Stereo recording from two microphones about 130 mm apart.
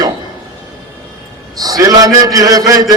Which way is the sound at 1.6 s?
30° right (ahead or behind).